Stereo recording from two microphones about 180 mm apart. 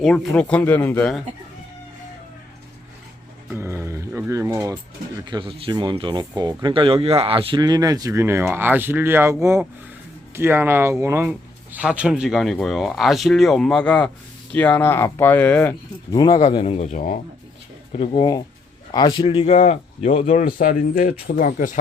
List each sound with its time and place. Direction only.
0.0 s speech: 5° left (ahead or behind)
3.5 s speech: 15° right (ahead or behind)
5.2 s speech: 25° right (ahead or behind); by 15.7 s 10° left (ahead or behind)
16.1 s speech: 25° left (ahead or behind); by 21.8 s 50° left (ahead or behind)